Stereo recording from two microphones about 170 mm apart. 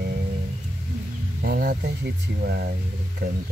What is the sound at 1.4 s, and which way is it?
Speech, 55° right (ahead or behind).